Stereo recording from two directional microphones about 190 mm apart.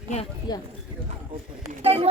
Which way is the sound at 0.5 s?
20° left (ahead or behind).